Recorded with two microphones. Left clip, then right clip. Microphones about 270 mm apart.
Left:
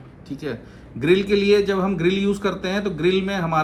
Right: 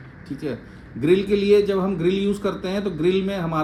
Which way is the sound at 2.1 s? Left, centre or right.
Left.